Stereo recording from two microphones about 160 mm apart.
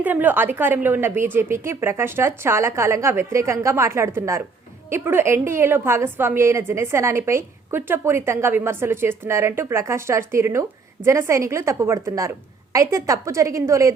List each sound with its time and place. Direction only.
0.0 s a woman's voice: 10° right (ahead or behind)